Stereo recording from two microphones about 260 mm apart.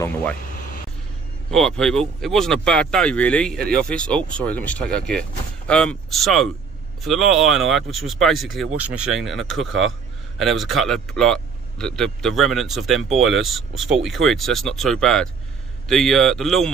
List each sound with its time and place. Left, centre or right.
0.0 s speech: centre
1.5 s a man's voice: centre
13.6 s speech: right
13.9 s a man's voice: centre